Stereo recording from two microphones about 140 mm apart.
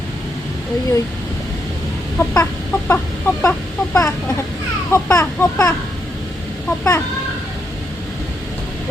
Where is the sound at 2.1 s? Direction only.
15° left (ahead or behind).